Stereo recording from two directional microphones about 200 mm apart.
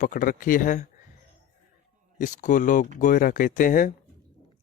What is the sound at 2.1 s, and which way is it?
Speech, 40° left (ahead or behind).